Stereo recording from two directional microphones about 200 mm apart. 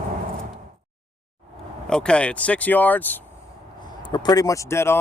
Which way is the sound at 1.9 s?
5° left (ahead or behind).